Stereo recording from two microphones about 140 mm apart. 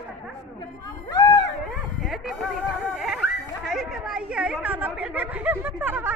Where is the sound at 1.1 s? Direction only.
30° left (ahead or behind).